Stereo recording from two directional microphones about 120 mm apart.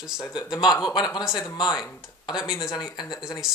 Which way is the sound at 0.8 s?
35° left (ahead or behind).